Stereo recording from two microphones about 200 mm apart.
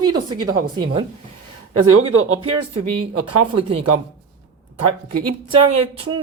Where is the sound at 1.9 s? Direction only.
90° right.